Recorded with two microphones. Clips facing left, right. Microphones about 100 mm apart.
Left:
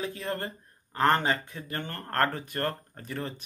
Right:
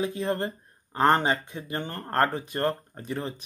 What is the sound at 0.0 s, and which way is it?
Speech, 20° right (ahead or behind).